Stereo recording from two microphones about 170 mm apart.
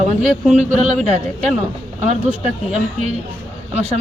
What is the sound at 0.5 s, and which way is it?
A woman's voice, 45° right (ahead or behind).